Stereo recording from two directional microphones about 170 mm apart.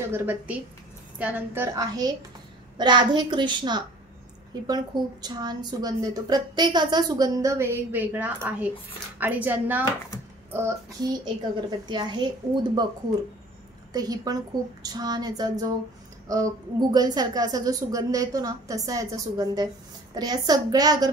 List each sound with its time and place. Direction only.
0.0 s a woman's voice: 15° right (ahead or behind)
13.9 s a woman's voice: 20° right (ahead or behind)